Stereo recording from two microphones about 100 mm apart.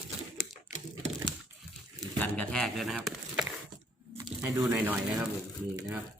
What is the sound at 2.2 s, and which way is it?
Speech, 15° left (ahead or behind).